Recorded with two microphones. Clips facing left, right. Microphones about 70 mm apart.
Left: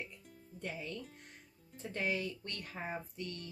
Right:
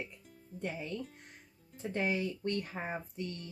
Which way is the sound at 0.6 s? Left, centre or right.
Centre.